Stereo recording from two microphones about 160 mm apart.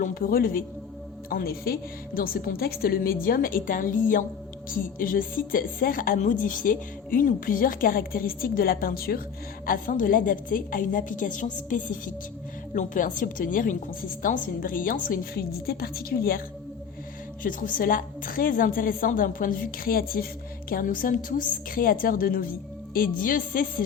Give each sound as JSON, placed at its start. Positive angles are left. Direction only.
{"t": 0.0, "sound": "a woman's voice", "side_deg": 65}
{"t": 9.6, "sound": "a woman's voice", "side_deg": 60}
{"t": 17.4, "sound": "a woman's voice", "side_deg": 60}